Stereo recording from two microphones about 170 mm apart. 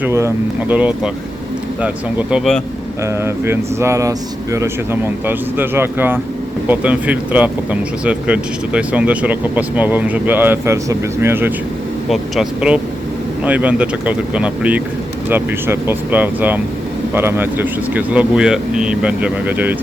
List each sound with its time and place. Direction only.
0.0 s speech: 15° right (ahead or behind)
3.0 s speech: 15° right (ahead or behind)
12.0 s speech: centre (ahead or behind)